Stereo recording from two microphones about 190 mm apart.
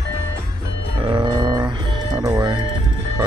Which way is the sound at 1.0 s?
25° right (ahead or behind).